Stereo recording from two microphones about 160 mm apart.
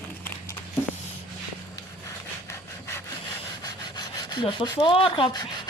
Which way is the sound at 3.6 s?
25° left (ahead or behind).